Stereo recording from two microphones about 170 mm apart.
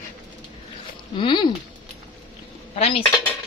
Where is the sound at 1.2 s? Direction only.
30° left (ahead or behind).